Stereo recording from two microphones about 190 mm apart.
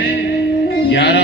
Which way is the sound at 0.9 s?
65° left (ahead or behind).